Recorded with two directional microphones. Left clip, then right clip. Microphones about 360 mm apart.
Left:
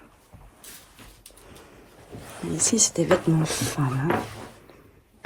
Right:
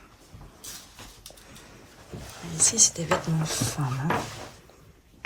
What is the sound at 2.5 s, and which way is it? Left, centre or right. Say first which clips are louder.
Speech: even; centre.